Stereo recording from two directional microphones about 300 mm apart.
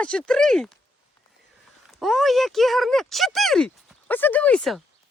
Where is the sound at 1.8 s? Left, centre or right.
Centre.